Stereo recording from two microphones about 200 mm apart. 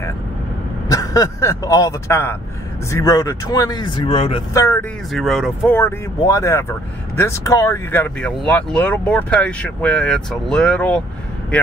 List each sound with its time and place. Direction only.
0.8 s speech: 20° left (ahead or behind)
4.6 s speech: 15° left (ahead or behind)
5.1 s speech: centre (ahead or behind)
5.7 s speech: 10° left (ahead or behind)